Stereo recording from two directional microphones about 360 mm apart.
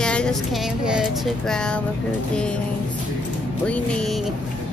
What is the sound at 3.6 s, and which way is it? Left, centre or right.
Speech, centre.